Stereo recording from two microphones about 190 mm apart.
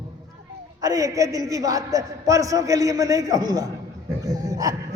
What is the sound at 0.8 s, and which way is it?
A man's voice, 20° right (ahead or behind).